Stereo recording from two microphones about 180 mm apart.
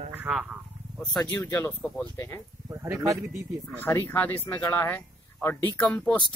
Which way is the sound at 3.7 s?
10° left (ahead or behind).